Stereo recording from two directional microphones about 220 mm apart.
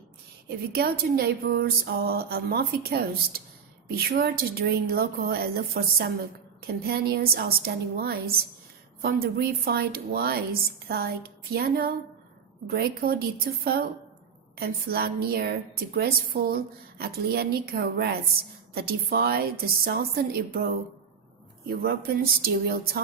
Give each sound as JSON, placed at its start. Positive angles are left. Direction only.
{"t": 0.7, "sound": "a woman's voice", "side_deg": -45}
{"t": 21.7, "sound": "a woman's voice", "side_deg": -45}